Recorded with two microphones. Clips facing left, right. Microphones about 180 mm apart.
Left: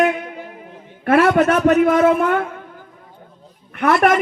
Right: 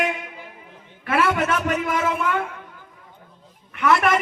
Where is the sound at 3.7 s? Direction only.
50° left (ahead or behind).